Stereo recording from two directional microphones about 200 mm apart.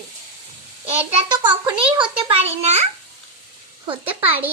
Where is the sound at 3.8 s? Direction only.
30° right (ahead or behind).